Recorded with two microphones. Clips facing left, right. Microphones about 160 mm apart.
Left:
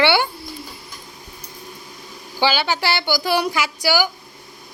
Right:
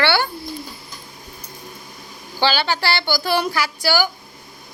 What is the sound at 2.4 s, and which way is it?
A woman's voice, 15° left (ahead or behind).